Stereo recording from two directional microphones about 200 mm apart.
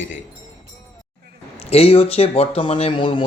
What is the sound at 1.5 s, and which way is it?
Speech, 30° left (ahead or behind).